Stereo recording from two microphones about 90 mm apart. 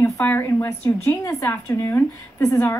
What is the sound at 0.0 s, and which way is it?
Speech, 25° left (ahead or behind).